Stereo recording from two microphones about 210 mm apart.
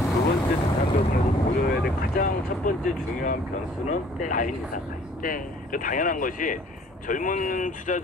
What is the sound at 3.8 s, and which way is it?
Speech, 35° left (ahead or behind).